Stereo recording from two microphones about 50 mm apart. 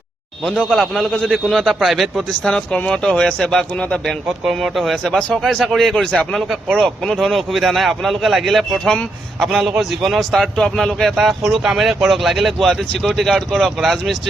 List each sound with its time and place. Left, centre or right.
0.7 s speech: centre
1.6 s a man's voice: centre
2.4 s speech: centre
4.4 s a man's voice: centre
5.0 s a man's voice: centre